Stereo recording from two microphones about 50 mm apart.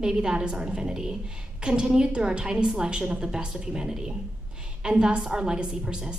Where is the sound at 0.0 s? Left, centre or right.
Centre.